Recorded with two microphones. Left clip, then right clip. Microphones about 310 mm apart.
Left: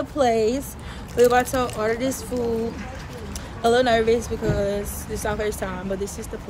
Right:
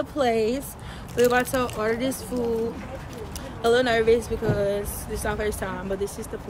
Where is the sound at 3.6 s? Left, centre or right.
Centre.